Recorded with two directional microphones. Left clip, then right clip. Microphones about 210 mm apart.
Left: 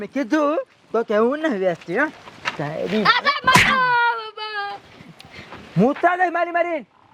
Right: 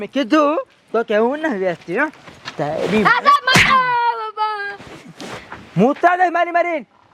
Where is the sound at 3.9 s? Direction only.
45° right (ahead or behind); by 4.7 s 65° right (ahead or behind).